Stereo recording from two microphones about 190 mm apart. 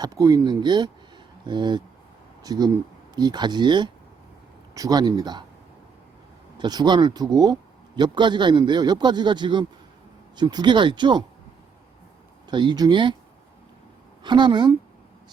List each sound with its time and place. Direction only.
0.0 s a man's voice: 20° right (ahead or behind)
6.6 s a man's voice: 20° right (ahead or behind)
12.5 s a man's voice: 25° right (ahead or behind)
14.3 s a man's voice: 25° right (ahead or behind)